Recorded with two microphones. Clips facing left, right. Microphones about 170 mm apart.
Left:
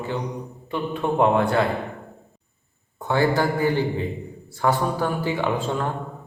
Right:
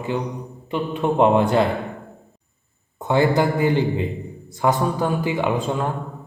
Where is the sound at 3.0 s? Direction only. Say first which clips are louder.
Right 3 dB; 20° right (ahead or behind).